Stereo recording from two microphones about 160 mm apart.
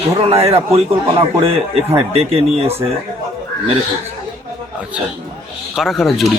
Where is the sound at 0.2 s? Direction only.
40° right (ahead or behind).